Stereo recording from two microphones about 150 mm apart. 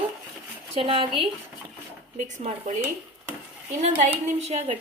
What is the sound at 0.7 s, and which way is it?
Speech, 40° right (ahead or behind).